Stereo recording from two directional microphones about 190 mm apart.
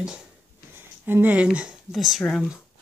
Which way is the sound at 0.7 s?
10° right (ahead or behind).